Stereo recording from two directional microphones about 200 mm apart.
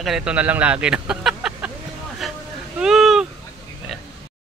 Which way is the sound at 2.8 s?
Centre (ahead or behind).